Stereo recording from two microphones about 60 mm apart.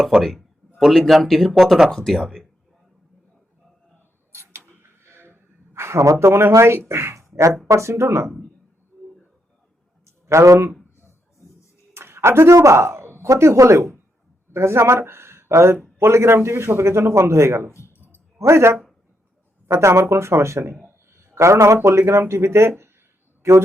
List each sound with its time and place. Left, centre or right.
0.2 s speech: centre
1.9 s speech: centre
4.3 s a sound: right
6.1 s a man's voice: right
10.2 s a man's voice: right
11.9 s a sound: right
13.2 s a man's voice: right
17.7 s speech: left
18.3 s a man's voice: right
20.8 s a sound: right
21.8 s a man's voice: right